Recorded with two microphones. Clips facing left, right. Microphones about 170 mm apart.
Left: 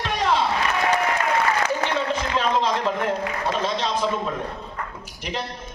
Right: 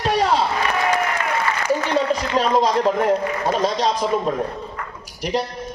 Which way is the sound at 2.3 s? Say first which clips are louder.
Right 5 dB; 40° right (ahead or behind).